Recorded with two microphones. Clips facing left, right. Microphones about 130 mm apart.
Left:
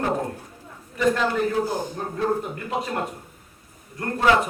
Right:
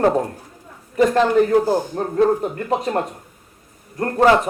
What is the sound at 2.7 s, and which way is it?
A man's voice, 40° right (ahead or behind).